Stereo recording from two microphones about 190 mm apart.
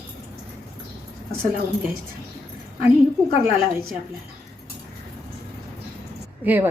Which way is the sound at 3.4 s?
50° right (ahead or behind).